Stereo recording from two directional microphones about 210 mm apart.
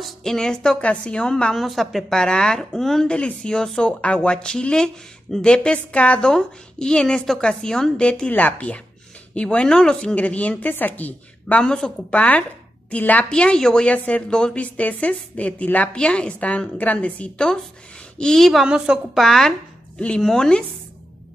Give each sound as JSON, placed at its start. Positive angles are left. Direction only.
{"t": 0.0, "sound": "a woman's voice", "side_deg": 0}